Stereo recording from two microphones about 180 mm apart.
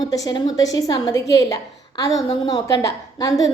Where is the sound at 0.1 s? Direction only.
20° left (ahead or behind).